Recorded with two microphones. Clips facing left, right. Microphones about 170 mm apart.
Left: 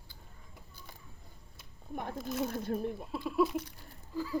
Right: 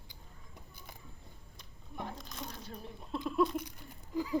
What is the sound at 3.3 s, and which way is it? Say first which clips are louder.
Speech: left 1 dB; 5° left (ahead or behind).